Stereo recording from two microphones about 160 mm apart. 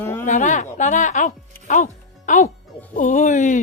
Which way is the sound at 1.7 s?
50° left (ahead or behind).